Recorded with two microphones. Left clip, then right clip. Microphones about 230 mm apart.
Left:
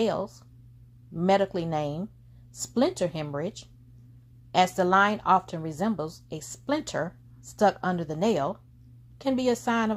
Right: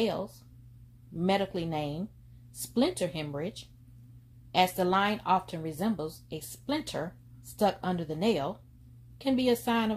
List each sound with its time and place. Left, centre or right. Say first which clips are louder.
0.0 s a woman's voice: left 4 dB; left